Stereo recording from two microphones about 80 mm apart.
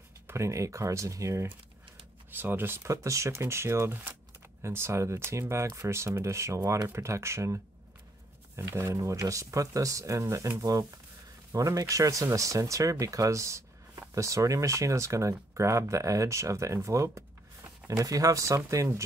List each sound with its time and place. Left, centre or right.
0.3 s speech: right
2.3 s speech: right
10.6 s speech: right